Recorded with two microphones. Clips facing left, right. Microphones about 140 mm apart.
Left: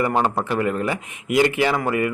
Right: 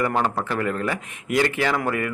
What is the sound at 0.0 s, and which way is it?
A man's voice, 15° left (ahead or behind).